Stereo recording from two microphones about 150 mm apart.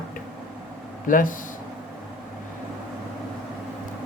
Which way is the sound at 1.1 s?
65° left (ahead or behind).